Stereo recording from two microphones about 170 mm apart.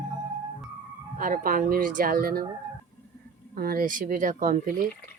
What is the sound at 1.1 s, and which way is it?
Speech, 55° right (ahead or behind).